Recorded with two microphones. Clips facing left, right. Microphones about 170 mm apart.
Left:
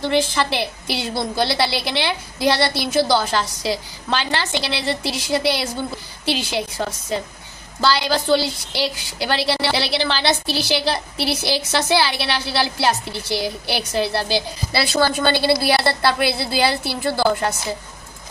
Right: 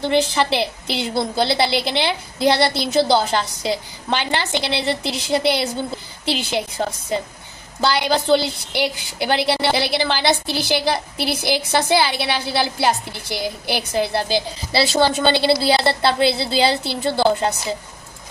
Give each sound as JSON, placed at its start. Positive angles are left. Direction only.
{"t": 0.1, "sound": "a woman's voice", "side_deg": -20}